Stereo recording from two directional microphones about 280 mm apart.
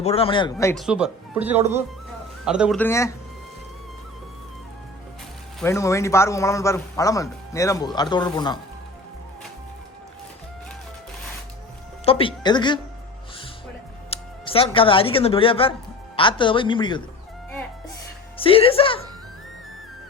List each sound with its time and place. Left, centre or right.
0.0 s a man's voice: left
0.9 s speech: centre
5.5 s a man's voice: centre
12.0 s a man's voice: centre
14.1 s a man's voice: centre
18.3 s a woman's voice: centre